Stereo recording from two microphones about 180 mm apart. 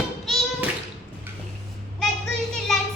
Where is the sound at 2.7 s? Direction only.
Centre (ahead or behind).